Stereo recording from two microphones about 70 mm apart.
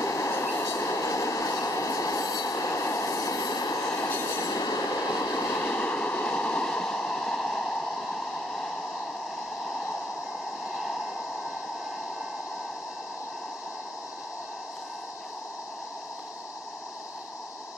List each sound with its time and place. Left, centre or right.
0.0 s train: left
4.1 s train: left
4.4 s train: left
5.4 s a sound: left
5.8 s a sound: left
10.7 s vehicle: centre